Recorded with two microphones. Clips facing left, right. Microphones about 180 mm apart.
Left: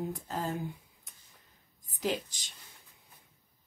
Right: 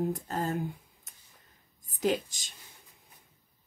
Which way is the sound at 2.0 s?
45° right (ahead or behind).